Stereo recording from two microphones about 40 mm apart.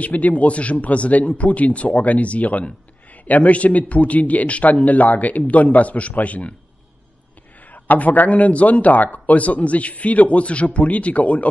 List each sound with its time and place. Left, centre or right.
0.0 s speech: left
7.7 s speech: left